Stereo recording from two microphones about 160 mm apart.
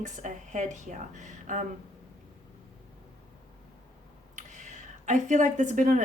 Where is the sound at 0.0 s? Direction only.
50° right (ahead or behind).